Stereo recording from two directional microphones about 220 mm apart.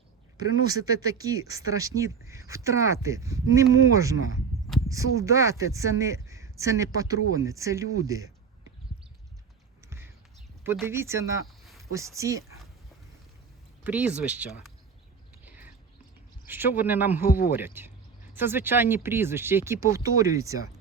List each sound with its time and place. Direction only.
0.7 s speech: 15° right (ahead or behind)
10.8 s speech: 10° right (ahead or behind)
11.4 s a sound: centre (ahead or behind)
11.8 s speech: 15° right (ahead or behind)
13.8 s speech: 5° right (ahead or behind)
15.4 s a sound: 10° right (ahead or behind)
16.5 s speech: 10° right (ahead or behind)
17.2 s speech: 40° left (ahead or behind)
17.5 s speech: 10° right (ahead or behind)